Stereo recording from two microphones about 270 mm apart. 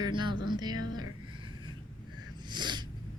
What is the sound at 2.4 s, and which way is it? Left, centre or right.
Sneeze, centre.